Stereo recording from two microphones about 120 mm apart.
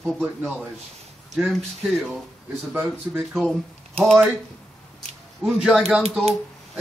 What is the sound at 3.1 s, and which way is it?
A man's voice, 5° left (ahead or behind).